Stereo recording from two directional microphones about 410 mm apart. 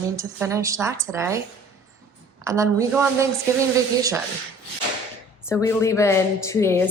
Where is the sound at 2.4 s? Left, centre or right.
Centre.